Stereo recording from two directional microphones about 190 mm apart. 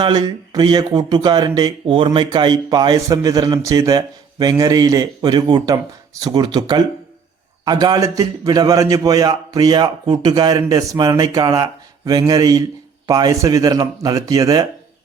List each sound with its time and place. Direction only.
0.0 s speech: 20° right (ahead or behind)